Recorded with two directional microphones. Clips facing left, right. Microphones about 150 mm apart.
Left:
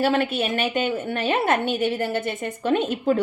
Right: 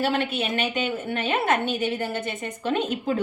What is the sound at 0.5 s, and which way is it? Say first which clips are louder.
Speech: left 3 dB; 50° left (ahead or behind).